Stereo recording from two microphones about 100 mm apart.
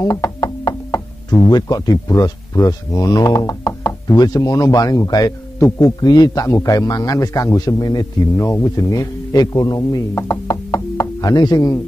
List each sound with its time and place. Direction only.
0.0 s knock: 35° left (ahead or behind)
1.5 s a man's voice: 40° left (ahead or behind)